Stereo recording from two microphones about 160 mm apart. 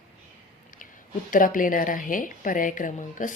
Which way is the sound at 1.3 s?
55° left (ahead or behind).